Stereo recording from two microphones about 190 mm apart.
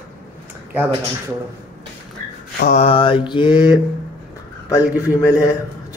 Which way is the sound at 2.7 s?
30° left (ahead or behind).